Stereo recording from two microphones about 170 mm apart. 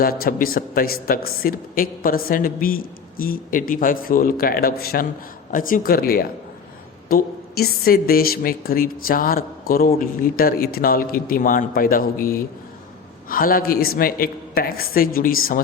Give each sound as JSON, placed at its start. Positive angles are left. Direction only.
{"t": 0.0, "sound": "a woman's voice", "side_deg": 60}